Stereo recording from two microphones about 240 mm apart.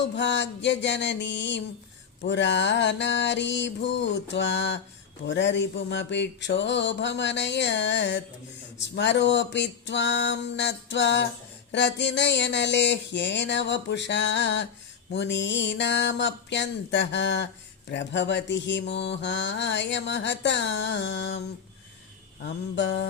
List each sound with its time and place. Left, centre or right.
0.0 s speech: left
22.4 s speech: left